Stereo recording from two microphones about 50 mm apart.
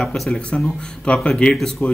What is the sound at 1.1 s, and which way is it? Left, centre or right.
Speech, left.